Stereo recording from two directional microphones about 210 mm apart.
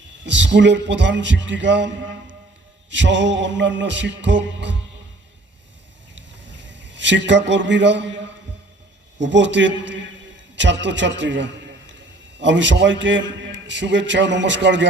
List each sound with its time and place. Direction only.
0.3 s a man's voice: 60° right (ahead or behind)
6.7 s a man's voice: 60° right (ahead or behind)
9.1 s a man's voice: 60° right (ahead or behind)